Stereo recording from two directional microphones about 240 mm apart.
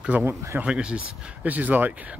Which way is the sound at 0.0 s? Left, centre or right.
Centre.